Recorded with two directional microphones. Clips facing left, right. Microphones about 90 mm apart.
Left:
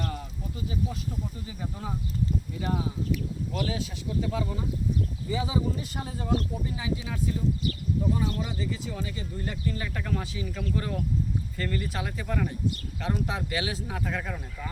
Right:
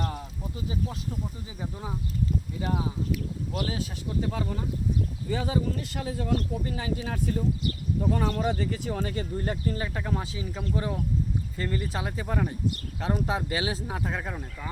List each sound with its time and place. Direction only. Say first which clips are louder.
3.6 s speech: even; 40° right (ahead or behind)
5.3 s speech: right 1 dB; 55° right (ahead or behind); by 6.8 s 75° right (ahead or behind)
6.8 s speech: left 1 dB; 50° right (ahead or behind)
9.0 s speech: right 5 dB; 45° right (ahead or behind); by 14.7 s 20° right (ahead or behind)